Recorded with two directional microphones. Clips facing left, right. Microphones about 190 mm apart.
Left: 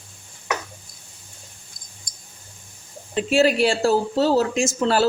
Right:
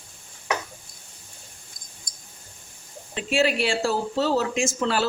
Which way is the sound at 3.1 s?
40° left (ahead or behind).